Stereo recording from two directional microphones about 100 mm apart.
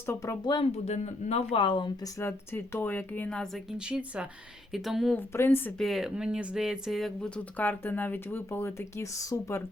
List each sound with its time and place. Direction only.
0.0 s speech: 30° left (ahead or behind)
0.6 s speech: 90° left
1.6 s speech: 55° left (ahead or behind)
2.1 s speech: 25° left (ahead or behind); by 3.8 s centre (ahead or behind)
3.8 s speech: 10° right (ahead or behind)
5.1 s speech: 25° left (ahead or behind)
5.8 s speech: centre (ahead or behind)
7.3 s speech: 15° left (ahead or behind)